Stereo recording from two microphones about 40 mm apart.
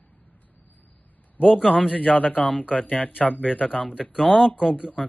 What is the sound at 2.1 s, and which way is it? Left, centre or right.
Speech, left.